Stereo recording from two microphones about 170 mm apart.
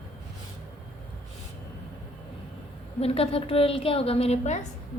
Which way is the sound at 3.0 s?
35° left (ahead or behind).